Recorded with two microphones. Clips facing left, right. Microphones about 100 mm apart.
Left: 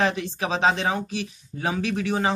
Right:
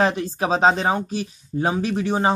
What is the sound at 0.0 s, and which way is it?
Speech, 35° right (ahead or behind).